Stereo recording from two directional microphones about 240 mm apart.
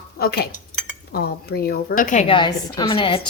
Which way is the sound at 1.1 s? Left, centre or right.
Left.